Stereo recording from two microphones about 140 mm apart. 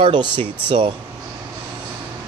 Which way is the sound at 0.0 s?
35° right (ahead or behind).